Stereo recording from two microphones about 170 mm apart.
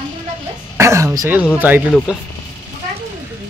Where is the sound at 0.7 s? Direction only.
15° right (ahead or behind).